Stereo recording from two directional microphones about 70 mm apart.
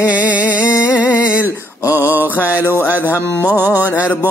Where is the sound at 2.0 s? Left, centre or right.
Right.